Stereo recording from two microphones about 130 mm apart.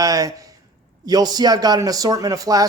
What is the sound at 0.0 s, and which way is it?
Speech, 25° right (ahead or behind).